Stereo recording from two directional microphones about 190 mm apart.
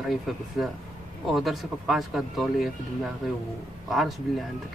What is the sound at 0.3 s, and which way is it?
Speech, centre (ahead or behind).